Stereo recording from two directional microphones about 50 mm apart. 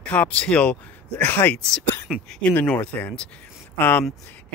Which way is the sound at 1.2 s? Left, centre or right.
Left.